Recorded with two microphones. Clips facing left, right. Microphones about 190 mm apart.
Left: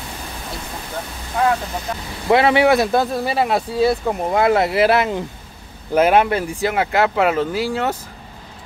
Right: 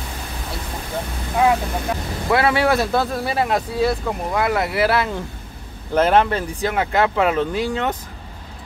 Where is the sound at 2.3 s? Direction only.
20° left (ahead or behind).